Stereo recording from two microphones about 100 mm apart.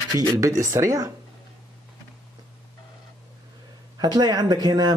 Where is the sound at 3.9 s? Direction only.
40° right (ahead or behind).